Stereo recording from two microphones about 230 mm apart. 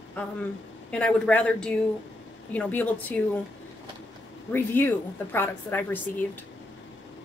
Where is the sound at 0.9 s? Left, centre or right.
Centre.